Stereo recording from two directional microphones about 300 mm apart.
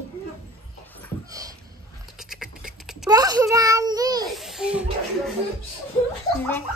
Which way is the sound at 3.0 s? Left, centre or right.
Centre.